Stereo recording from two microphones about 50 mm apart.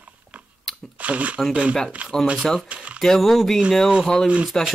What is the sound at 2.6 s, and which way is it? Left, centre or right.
Speech, right.